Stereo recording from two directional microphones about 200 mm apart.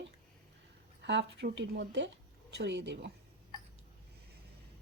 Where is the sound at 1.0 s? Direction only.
60° right (ahead or behind).